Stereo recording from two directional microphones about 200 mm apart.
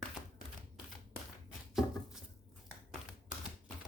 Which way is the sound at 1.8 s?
Centre (ahead or behind).